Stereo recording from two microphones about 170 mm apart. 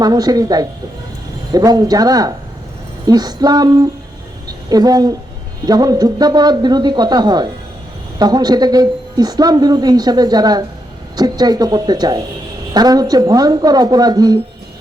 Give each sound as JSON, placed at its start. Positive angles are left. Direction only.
{"t": 0.0, "sound": "speech", "side_deg": -25}